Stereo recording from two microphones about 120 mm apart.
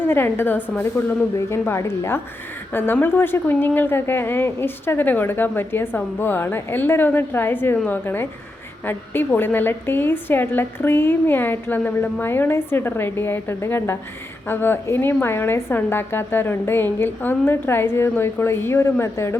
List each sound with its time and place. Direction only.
0.0 s a woman's voice: 20° left (ahead or behind)